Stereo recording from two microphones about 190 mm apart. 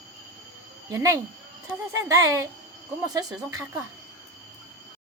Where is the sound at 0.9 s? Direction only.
15° right (ahead or behind).